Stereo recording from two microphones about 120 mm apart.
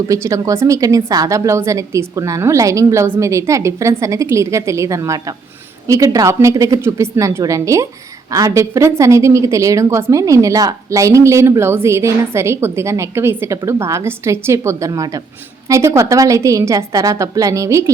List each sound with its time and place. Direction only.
0.1 s a woman's voice: 25° right (ahead or behind)